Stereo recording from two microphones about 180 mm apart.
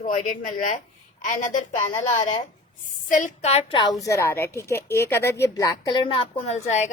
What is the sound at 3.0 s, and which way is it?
Speech, 45° left (ahead or behind).